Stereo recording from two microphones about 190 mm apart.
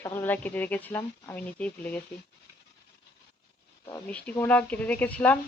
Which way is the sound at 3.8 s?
10° left (ahead or behind).